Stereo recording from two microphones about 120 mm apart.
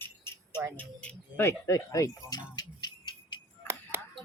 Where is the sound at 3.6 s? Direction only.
20° right (ahead or behind).